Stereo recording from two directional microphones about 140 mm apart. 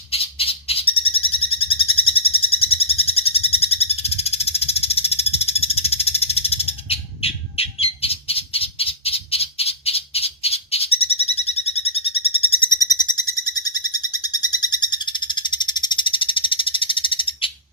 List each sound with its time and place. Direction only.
0.1 s bird: 45° left (ahead or behind)
12.8 s bird: 30° left (ahead or behind)
13.7 s frog: 30° left (ahead or behind)